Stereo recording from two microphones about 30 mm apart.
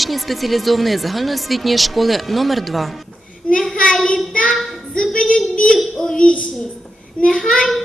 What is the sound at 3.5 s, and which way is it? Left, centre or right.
A child's voice, left.